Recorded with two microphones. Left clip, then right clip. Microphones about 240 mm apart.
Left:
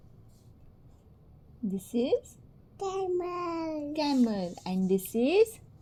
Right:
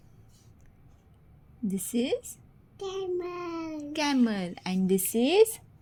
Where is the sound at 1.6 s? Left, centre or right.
Right.